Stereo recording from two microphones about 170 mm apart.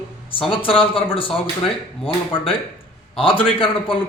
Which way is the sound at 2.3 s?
30° left (ahead or behind).